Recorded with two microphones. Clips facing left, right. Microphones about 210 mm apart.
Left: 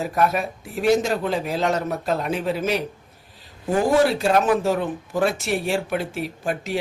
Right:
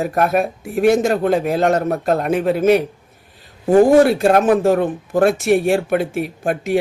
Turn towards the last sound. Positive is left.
turn(degrees=-55)  # may be behind; listen again after turning